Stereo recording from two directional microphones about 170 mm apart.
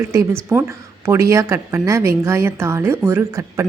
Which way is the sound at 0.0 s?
15° right (ahead or behind).